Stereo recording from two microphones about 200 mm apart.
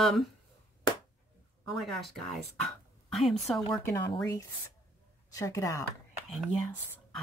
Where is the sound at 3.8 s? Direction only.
20° left (ahead or behind).